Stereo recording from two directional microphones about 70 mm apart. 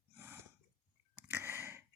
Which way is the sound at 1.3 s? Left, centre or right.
Right.